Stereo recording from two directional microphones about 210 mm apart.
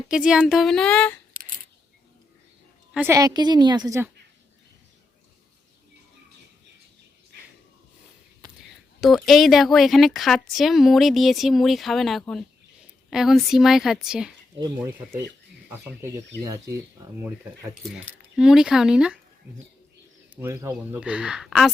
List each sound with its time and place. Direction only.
0.1 s a woman's voice: 5° right (ahead or behind)
2.9 s a woman's voice: 10° right (ahead or behind)
9.0 s a woman's voice: centre (ahead or behind)
15.7 s a woman's voice: 10° right (ahead or behind)
20.3 s a woman's voice: 10° right (ahead or behind)